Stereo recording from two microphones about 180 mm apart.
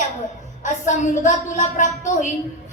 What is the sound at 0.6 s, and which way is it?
Music, 40° left (ahead or behind).